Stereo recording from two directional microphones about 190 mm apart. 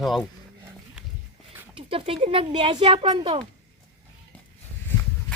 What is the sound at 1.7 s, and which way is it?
Speech, 30° right (ahead or behind).